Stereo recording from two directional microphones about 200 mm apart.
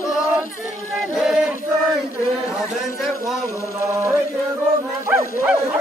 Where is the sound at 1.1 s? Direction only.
Centre (ahead or behind).